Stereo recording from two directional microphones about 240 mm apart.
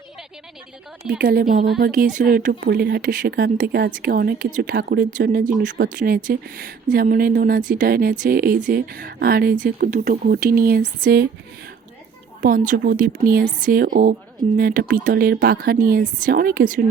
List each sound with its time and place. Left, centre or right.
1.2 s a woman's voice: right
12.4 s a woman's voice: right